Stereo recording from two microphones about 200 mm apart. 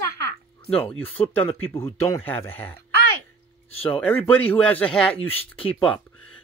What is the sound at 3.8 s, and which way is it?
Speech, 5° left (ahead or behind).